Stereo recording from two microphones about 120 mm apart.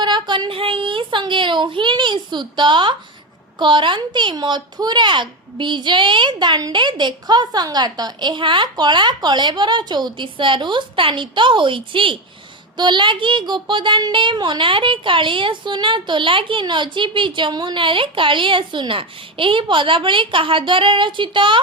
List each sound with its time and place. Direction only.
0.0 s speech: 40° right (ahead or behind)